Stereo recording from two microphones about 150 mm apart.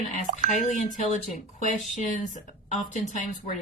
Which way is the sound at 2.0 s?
60° left (ahead or behind).